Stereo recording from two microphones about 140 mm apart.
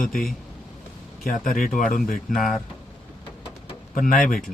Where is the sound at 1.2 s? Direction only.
85° left.